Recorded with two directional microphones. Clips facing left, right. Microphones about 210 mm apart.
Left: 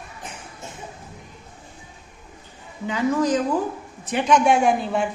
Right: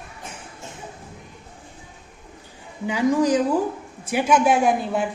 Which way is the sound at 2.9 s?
10° right (ahead or behind).